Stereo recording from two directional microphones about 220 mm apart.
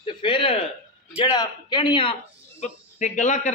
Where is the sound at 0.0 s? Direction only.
20° left (ahead or behind).